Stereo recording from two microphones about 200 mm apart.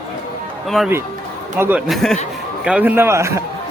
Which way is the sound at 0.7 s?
Centre (ahead or behind).